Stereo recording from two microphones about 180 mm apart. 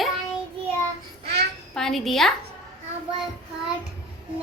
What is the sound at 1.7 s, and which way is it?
Speech, centre (ahead or behind).